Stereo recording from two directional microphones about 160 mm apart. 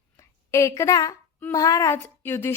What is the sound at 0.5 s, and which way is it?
A woman's voice, 20° left (ahead or behind).